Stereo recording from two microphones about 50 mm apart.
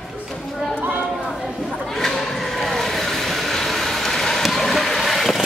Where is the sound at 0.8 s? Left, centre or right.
Right.